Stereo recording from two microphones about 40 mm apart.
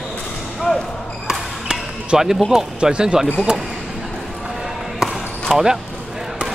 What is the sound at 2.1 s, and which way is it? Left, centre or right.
Speech, centre.